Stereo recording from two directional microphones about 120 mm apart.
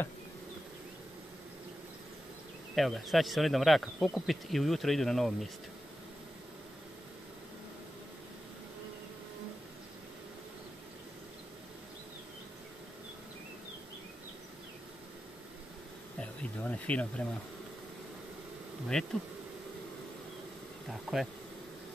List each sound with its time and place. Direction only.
2.7 s speech: centre (ahead or behind)
16.2 s speech: 10° left (ahead or behind)
18.9 s bee: 5° left (ahead or behind)
20.9 s speech: centre (ahead or behind)